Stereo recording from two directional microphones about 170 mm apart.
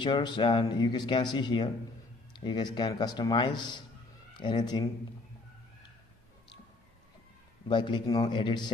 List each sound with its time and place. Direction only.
0.0 s speech: 25° left (ahead or behind)
7.6 s speech: 25° left (ahead or behind)